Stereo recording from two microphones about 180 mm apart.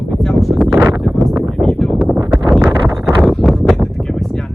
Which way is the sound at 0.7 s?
15° right (ahead or behind).